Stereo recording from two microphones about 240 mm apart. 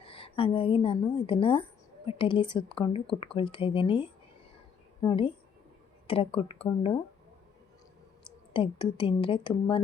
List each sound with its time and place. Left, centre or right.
0.0 s a woman's voice: left
8.5 s speech: centre